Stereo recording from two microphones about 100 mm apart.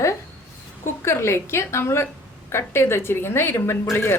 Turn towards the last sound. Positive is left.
turn(degrees=25)  # may be behind; listen again after turning